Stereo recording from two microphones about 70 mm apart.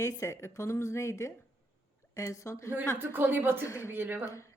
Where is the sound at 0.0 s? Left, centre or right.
Left.